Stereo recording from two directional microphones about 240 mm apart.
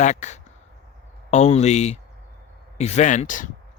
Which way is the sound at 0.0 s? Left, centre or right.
Left.